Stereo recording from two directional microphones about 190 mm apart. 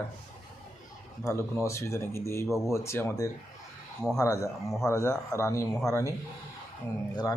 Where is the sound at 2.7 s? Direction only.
15° left (ahead or behind).